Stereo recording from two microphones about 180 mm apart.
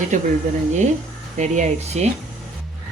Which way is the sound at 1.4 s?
40° right (ahead or behind).